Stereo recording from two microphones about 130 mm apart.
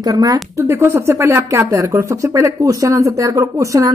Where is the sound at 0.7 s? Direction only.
20° right (ahead or behind).